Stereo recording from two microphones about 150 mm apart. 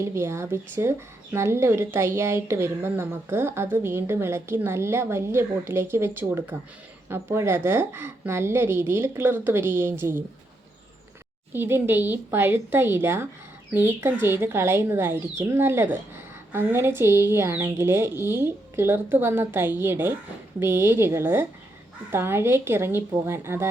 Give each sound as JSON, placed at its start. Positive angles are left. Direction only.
{"t": 0.0, "sound": "a woman's voice", "side_deg": -20}
{"t": 11.5, "sound": "a woman's voice", "side_deg": -15}